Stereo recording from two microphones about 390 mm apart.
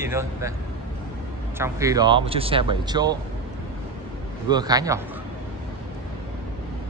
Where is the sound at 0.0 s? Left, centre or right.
Centre.